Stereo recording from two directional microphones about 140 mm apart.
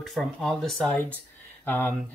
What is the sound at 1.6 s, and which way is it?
Speech, 15° left (ahead or behind).